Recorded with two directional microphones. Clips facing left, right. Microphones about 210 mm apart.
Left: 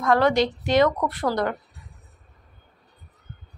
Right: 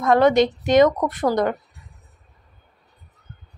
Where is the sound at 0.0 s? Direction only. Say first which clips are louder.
Right 4 dB; 20° right (ahead or behind).